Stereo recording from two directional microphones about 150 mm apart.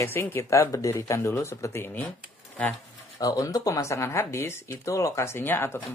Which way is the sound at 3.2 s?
25° left (ahead or behind).